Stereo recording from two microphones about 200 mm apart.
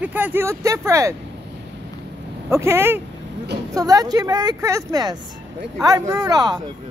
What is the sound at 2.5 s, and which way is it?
Speech, 15° right (ahead or behind).